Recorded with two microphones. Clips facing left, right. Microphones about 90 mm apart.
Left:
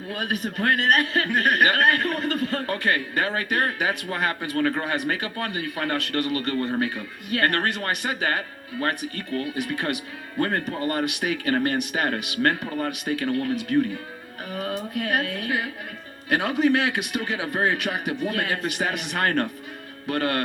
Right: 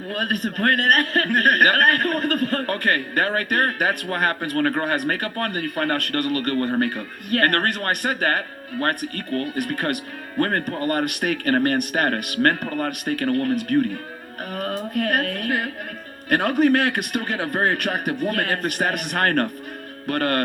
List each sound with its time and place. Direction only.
0.1 s a man's voice: 50° right (ahead or behind)